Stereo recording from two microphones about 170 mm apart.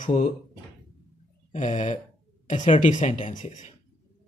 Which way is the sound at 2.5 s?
45° left (ahead or behind).